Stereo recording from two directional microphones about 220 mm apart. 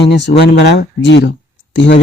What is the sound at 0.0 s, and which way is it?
Speech, 50° left (ahead or behind).